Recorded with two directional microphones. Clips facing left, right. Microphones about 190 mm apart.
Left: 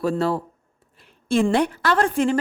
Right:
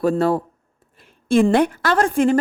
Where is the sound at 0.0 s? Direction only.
50° right (ahead or behind).